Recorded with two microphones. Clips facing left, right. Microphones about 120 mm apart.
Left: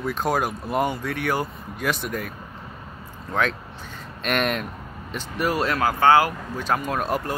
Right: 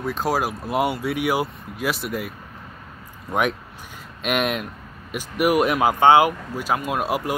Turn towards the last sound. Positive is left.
turn(degrees=-10)  # may be behind; listen again after turning